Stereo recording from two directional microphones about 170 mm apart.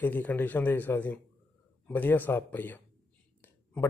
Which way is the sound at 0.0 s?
10° left (ahead or behind).